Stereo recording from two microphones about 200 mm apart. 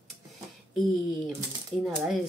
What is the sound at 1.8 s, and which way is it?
Speech, centre (ahead or behind).